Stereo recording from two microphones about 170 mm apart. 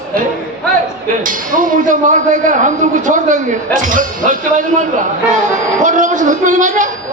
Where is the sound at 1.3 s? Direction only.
55° right (ahead or behind).